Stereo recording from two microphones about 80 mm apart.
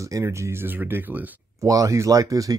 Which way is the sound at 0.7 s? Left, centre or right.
Right.